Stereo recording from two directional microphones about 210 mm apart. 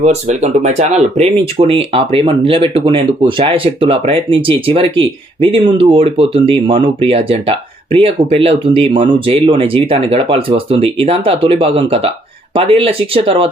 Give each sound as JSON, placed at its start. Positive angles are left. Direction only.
{"t": 0.0, "sound": "speech", "side_deg": -30}